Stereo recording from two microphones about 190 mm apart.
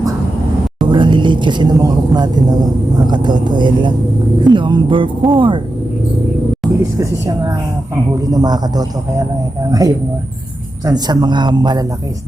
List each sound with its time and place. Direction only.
0.9 s speech: 25° right (ahead or behind)
7.0 s a woman's voice: 20° right (ahead or behind)